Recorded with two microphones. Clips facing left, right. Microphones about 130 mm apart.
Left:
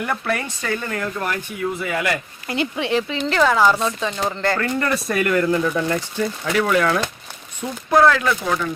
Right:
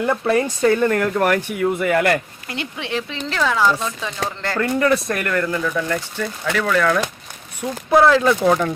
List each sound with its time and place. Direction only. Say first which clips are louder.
0.0 s speech: right 6 dB; 25° right (ahead or behind)
0.7 s speech: right 5 dB; 50° right (ahead or behind)
2.5 s speech: left 5 dB; centre (ahead or behind)
5.0 s speech: left 3 dB; 15° left (ahead or behind)
8.0 s speech: right 3 dB; 25° right (ahead or behind)